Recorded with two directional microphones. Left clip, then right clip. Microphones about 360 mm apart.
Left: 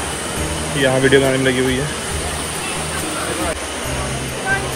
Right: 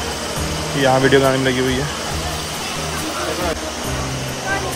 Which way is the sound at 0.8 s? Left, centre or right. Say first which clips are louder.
Even; right.